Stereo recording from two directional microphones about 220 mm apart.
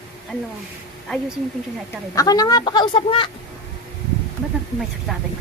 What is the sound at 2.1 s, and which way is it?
A woman's voice, 15° left (ahead or behind).